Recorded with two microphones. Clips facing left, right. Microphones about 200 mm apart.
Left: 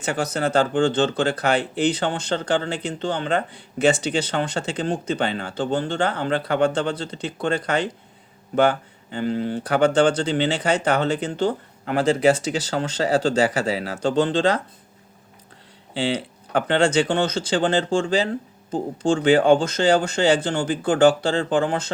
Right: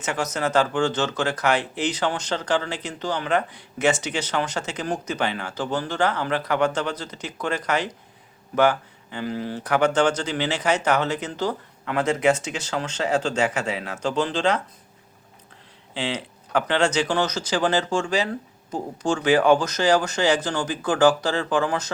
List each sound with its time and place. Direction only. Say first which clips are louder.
0.0 s speech: left 2 dB; 30° left (ahead or behind)
16.0 s speech: left 5 dB; 30° left (ahead or behind)